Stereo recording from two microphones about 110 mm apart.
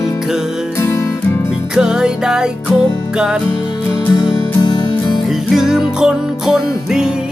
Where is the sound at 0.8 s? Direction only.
25° left (ahead or behind).